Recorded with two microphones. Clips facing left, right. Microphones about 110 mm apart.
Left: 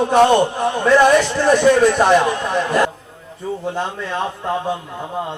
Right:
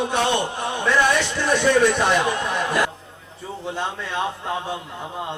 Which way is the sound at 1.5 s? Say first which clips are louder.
Left 5 dB; 45° left (ahead or behind).